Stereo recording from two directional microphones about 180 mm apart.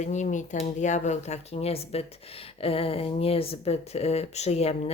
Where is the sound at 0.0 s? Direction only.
40° left (ahead or behind).